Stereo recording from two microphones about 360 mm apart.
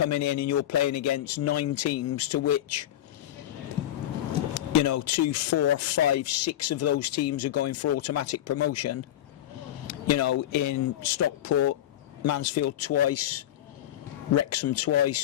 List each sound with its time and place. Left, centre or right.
0.1 s speech: left
4.5 s speech: left